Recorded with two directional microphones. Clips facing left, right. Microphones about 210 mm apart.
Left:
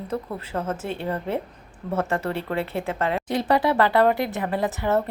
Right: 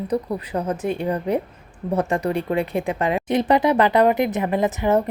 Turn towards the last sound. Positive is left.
turn(degrees=-20)  # may be behind; listen again after turning